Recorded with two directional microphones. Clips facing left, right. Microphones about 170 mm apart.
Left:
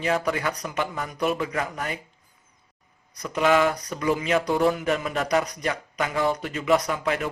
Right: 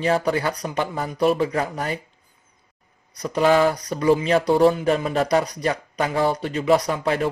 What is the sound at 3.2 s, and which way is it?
Speech, 35° right (ahead or behind).